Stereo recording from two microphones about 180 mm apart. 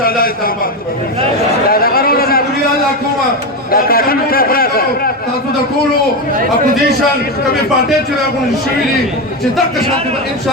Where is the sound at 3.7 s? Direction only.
55° left (ahead or behind).